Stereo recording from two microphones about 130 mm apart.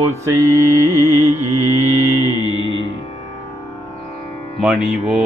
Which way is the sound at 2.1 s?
30° left (ahead or behind).